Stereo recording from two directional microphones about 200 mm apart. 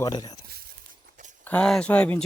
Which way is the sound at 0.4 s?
50° right (ahead or behind).